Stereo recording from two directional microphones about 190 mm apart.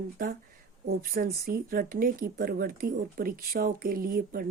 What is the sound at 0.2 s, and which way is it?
A woman's voice, 50° right (ahead or behind).